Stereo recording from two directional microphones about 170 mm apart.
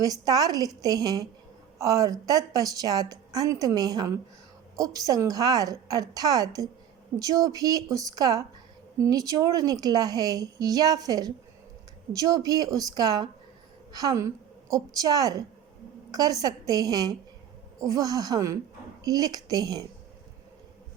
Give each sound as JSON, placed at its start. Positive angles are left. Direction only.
{"t": 0.0, "sound": "a woman's voice", "side_deg": -20}